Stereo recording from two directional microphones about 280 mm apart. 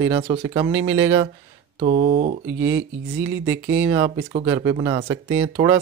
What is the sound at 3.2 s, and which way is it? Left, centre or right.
Speech, centre.